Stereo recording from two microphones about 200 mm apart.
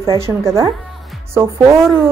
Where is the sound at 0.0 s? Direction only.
15° right (ahead or behind).